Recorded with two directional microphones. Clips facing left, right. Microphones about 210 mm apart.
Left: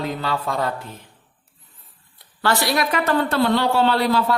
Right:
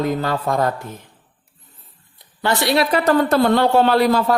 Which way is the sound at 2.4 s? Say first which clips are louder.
Right 3 dB; 20° right (ahead or behind).